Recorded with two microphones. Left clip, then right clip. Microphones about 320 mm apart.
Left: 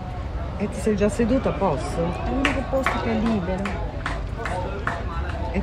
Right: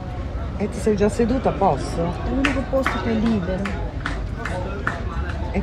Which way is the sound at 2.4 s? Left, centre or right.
Left.